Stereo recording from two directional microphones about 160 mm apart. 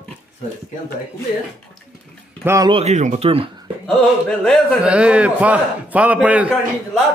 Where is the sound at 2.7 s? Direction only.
45° right (ahead or behind).